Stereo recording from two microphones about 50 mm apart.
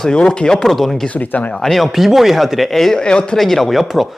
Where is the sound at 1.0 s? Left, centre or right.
Left.